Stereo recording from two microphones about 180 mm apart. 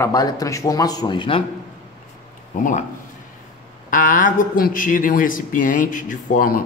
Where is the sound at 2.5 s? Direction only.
45° left (ahead or behind).